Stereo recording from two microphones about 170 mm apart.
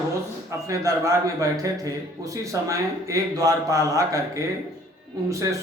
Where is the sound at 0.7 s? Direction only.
20° right (ahead or behind).